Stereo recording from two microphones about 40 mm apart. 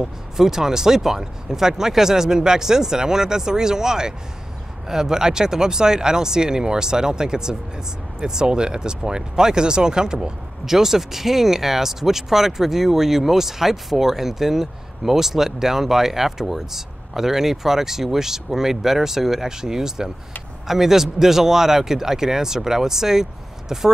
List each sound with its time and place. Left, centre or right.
0.0 s speech: centre